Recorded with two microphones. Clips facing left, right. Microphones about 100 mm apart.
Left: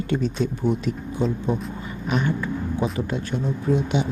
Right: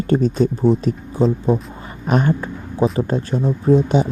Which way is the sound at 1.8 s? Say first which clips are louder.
Right 6 dB; 45° right (ahead or behind).